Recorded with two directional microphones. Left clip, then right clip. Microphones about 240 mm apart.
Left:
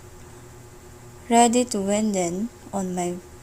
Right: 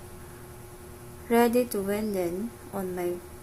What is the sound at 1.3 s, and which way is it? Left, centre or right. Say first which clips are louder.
A woman's voice: left 5 dB; left.